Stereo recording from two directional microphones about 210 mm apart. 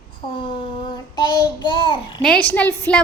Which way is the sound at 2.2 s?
5° left (ahead or behind).